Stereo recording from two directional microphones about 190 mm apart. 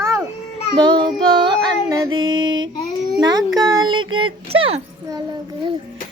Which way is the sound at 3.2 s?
20° right (ahead or behind).